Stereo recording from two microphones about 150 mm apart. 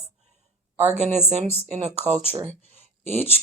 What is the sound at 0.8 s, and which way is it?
Speech, 50° right (ahead or behind).